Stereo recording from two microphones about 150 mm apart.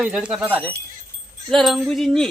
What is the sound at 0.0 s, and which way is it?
Music, 5° right (ahead or behind).